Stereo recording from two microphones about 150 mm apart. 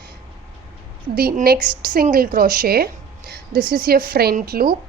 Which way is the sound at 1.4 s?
85° right.